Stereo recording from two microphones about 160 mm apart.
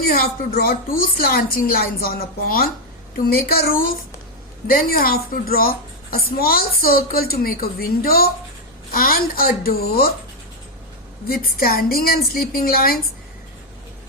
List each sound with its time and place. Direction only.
0.0 s a woman's voice: 70° left (ahead or behind)
11.3 s a woman's voice: 70° left (ahead or behind)